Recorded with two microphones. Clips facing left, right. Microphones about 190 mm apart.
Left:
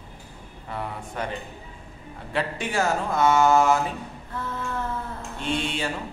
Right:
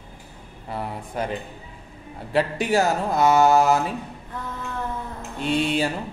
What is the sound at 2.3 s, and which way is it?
Speech, 35° right (ahead or behind).